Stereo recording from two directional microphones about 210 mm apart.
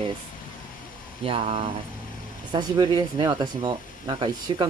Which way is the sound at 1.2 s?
30° right (ahead or behind).